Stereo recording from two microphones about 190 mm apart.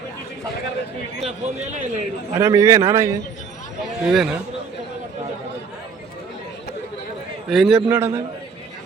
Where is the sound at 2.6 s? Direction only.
15° right (ahead or behind).